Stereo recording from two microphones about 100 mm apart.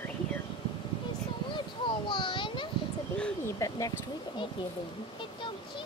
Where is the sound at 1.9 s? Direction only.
55° left (ahead or behind).